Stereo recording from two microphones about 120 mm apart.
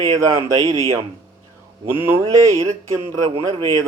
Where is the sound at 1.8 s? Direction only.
20° right (ahead or behind).